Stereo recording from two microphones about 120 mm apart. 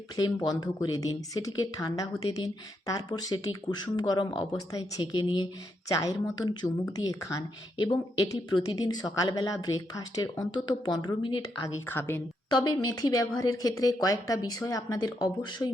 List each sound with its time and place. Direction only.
0.4 s a woman's voice: 30° left (ahead or behind)
11.6 s a woman's voice: 20° left (ahead or behind)
12.5 s a woman's voice: 35° left (ahead or behind)